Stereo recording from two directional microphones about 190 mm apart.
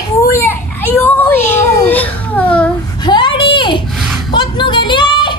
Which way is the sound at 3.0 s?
25° left (ahead or behind).